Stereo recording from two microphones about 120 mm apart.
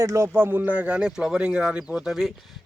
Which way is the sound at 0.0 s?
25° right (ahead or behind).